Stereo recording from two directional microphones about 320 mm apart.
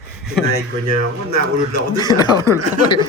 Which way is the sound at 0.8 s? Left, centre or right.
Right.